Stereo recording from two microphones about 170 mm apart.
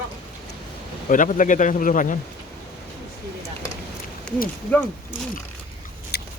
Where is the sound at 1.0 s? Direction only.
50° left (ahead or behind).